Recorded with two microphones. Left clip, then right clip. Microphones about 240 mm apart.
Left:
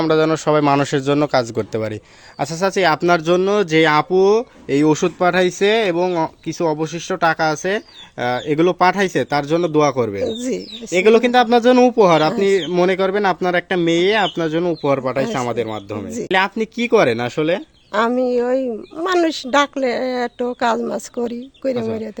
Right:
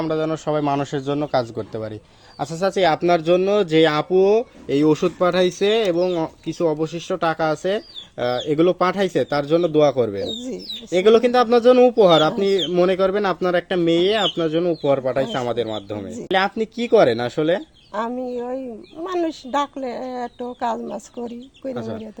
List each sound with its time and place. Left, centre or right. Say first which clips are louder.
0.0 s speech: left 7 dB; left